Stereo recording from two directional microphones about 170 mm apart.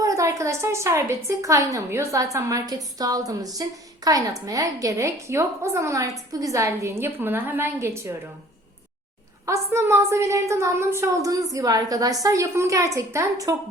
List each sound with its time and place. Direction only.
0.0 s a woman's voice: 20° right (ahead or behind)
9.5 s a woman's voice: 15° right (ahead or behind)